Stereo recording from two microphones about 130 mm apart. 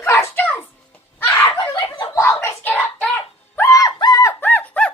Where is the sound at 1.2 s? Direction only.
20° left (ahead or behind).